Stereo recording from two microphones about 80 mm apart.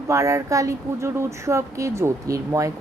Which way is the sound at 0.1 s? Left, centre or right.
Right.